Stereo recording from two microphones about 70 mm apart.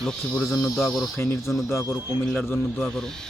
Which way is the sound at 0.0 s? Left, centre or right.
Centre.